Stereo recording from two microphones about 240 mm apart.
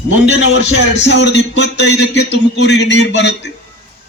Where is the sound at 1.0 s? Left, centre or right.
Left.